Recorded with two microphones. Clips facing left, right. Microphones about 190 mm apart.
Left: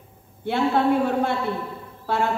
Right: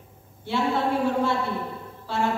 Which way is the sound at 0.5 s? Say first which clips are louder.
Left 4 dB; 55° left (ahead or behind).